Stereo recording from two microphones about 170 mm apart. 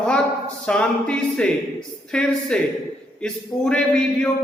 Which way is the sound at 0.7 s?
5° left (ahead or behind).